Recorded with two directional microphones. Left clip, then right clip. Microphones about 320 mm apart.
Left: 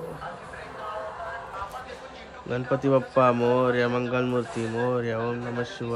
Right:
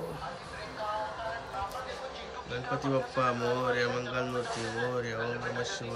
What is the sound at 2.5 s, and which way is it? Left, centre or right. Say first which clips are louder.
Speech: left 8 dB; centre.